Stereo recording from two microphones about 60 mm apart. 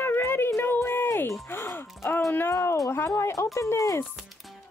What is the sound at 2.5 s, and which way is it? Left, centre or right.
Speech, left.